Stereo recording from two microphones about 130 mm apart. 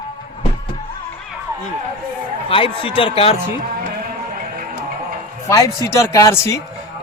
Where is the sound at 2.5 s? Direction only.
45° left (ahead or behind).